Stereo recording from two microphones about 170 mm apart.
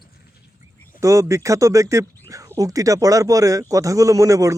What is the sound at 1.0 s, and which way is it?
Speech, 20° right (ahead or behind).